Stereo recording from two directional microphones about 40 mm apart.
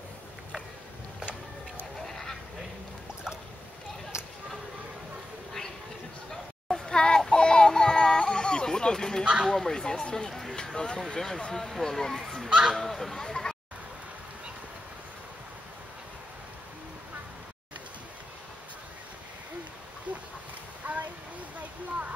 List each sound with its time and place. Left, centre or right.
2.0 s goose: centre
6.3 s music: centre
9.2 s a sound: right
9.5 s speech: centre
12.4 s speech: right
12.7 s speech: centre
20.8 s a sound: right